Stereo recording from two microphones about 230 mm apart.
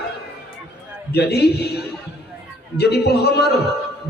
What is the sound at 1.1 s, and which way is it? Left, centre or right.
A man's voice, left.